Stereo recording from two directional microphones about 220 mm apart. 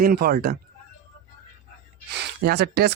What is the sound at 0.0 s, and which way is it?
Speech, 40° right (ahead or behind).